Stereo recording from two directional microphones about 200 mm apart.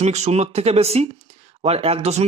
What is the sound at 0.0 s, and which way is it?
Speech, 35° right (ahead or behind).